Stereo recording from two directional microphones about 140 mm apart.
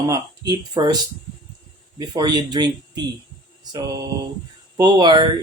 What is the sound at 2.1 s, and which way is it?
Speech, 30° right (ahead or behind).